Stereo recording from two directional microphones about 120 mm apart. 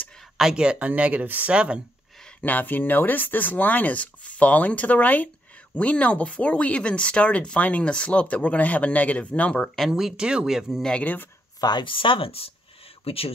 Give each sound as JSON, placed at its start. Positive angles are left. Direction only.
{"t": 0.4, "sound": "speech", "side_deg": -5}
{"t": 2.2, "sound": "speech", "side_deg": 15}
{"t": 9.8, "sound": "speech", "side_deg": -5}
{"t": 10.9, "sound": "speech", "side_deg": 10}
{"t": 11.6, "sound": "speech", "side_deg": 40}